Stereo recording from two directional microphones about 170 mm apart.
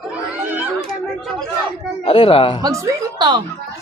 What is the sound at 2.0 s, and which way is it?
Speech, 30° left (ahead or behind).